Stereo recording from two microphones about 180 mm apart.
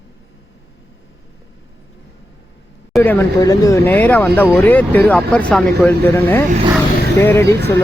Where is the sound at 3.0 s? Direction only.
10° left (ahead or behind).